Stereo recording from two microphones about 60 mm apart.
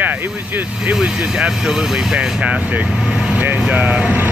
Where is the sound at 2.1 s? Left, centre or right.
Centre.